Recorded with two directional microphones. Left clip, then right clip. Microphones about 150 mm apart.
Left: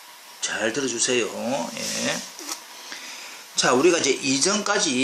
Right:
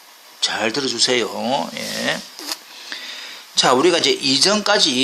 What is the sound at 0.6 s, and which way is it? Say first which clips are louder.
Speech: right 4 dB; 85° right.